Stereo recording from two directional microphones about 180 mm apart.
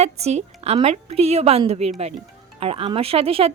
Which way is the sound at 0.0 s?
35° right (ahead or behind).